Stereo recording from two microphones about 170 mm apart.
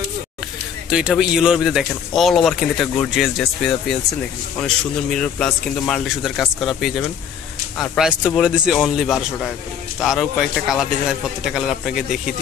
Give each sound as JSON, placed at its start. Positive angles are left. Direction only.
{"t": 0.8, "sound": "a man's voice", "side_deg": -5}